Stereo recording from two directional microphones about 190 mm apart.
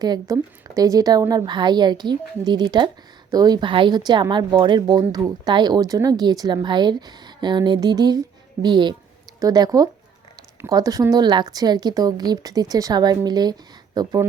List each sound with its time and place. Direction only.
0.0 s speech: 20° right (ahead or behind)